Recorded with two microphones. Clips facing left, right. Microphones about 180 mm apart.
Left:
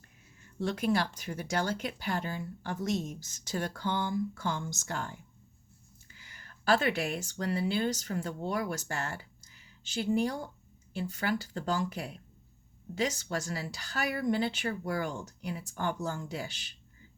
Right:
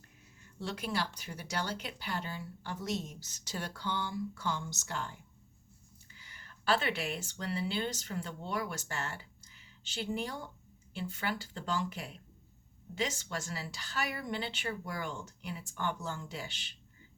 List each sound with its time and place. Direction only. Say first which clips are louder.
0.6 s speech: left 7 dB; 45° left (ahead or behind)
6.1 s a woman's voice: left 1 dB; 45° left (ahead or behind)